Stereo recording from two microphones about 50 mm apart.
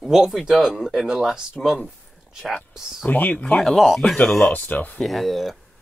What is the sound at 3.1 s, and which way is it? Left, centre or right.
Speech, left.